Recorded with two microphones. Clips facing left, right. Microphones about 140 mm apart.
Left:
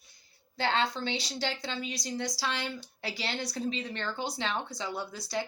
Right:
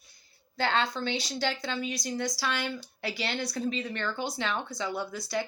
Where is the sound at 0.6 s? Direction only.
25° left (ahead or behind).